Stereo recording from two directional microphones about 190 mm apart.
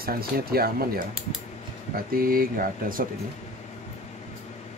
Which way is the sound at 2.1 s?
50° right (ahead or behind).